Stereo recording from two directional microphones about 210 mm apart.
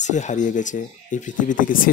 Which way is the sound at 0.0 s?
35° left (ahead or behind).